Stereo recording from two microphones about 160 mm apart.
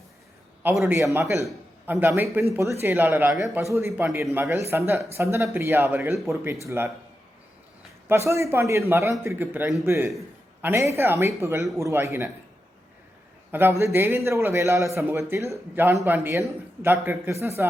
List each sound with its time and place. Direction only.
0.9 s a man's voice: 15° right (ahead or behind)
8.0 s a man's voice: 15° right (ahead or behind)
13.5 s a man's voice: 15° right (ahead or behind)